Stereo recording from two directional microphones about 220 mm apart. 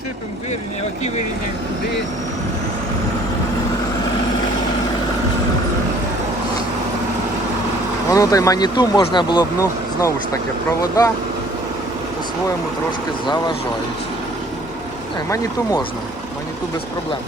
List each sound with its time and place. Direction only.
8.1 s speech: 15° left (ahead or behind)